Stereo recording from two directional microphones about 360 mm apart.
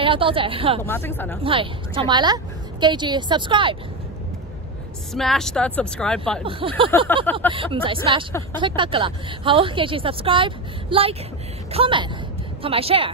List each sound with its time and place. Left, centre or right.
0.0 s a woman's voice: centre
0.8 s speech: centre
1.4 s a woman's voice: centre
5.1 s speech: centre
6.6 s a woman's voice: centre